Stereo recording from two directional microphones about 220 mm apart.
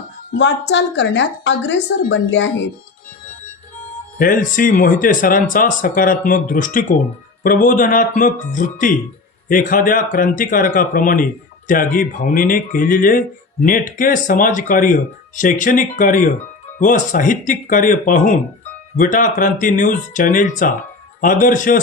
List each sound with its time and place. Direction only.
0.3 s a woman's voice: 55° left (ahead or behind)
4.2 s speech: 40° left (ahead or behind)